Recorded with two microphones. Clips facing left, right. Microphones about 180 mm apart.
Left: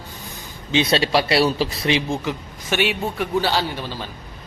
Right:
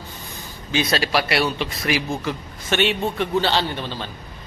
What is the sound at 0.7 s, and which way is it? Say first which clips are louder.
Speech: left 3 dB; 25° left (ahead or behind).